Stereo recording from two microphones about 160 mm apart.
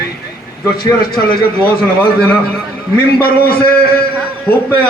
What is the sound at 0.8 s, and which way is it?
Speech, 25° left (ahead or behind).